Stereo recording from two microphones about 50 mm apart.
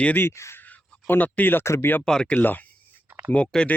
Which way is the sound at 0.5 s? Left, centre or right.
Left.